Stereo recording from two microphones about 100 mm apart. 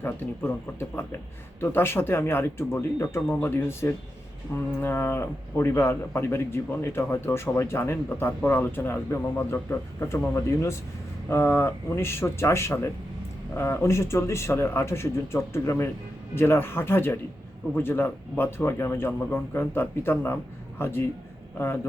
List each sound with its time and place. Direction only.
0.0 s speech: 20° left (ahead or behind)
1.6 s speech: 20° left (ahead or behind)